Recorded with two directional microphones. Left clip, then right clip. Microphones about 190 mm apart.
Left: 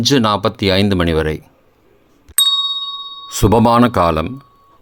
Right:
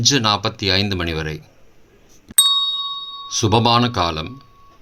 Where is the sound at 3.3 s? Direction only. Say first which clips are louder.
Left 4 dB; 45° left (ahead or behind).